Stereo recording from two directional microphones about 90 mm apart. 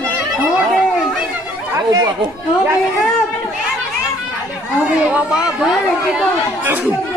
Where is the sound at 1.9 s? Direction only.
45° right (ahead or behind).